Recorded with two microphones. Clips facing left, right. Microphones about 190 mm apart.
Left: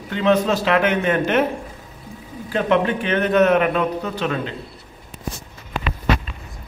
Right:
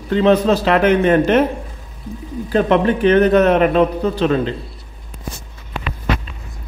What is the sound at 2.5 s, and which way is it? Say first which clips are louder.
A man's voice: right 4 dB; 35° right (ahead or behind).